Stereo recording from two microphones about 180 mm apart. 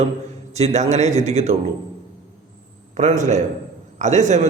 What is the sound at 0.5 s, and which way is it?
A man's voice, 40° right (ahead or behind).